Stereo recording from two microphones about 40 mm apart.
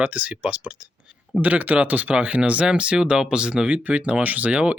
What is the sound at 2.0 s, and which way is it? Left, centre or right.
Speech, right.